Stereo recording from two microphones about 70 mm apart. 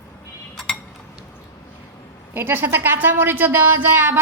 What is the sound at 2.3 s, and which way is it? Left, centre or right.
A woman's voice, right.